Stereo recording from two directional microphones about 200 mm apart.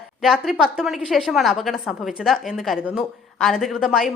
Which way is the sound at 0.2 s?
Centre (ahead or behind).